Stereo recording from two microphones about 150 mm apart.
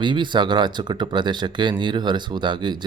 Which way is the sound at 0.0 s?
30° right (ahead or behind).